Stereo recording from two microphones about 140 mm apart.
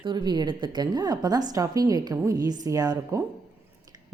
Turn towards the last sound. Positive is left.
turn(degrees=-25)  # may be behind; listen again after turning